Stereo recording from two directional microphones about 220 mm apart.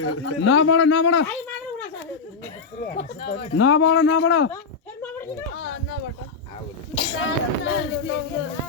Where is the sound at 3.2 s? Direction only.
60° left (ahead or behind).